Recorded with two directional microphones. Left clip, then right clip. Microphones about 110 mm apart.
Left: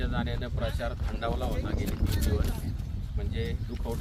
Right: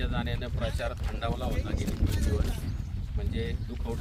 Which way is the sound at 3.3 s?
25° right (ahead or behind).